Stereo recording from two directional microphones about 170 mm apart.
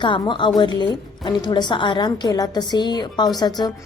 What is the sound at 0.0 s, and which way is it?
A woman's voice, 30° left (ahead or behind).